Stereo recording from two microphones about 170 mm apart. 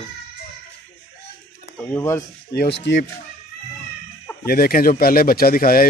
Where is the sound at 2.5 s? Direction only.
80° left.